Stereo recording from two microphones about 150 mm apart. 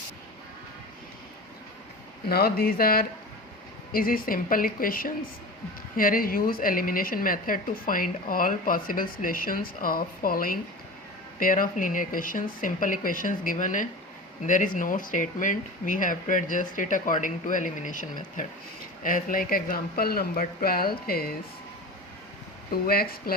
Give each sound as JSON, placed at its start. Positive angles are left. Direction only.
{"t": 2.3, "sound": "a woman's voice", "side_deg": 90}
{"t": 19.0, "sound": "speech", "side_deg": 70}
{"t": 22.7, "sound": "speech", "side_deg": 90}